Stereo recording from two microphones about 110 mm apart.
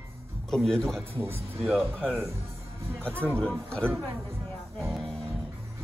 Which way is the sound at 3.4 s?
5° left (ahead or behind).